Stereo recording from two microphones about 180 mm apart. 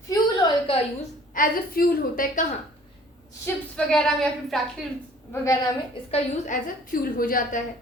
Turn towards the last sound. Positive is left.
turn(degrees=50)  # may be behind; listen again after turning